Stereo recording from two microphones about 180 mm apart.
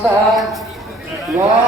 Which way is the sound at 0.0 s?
Centre (ahead or behind).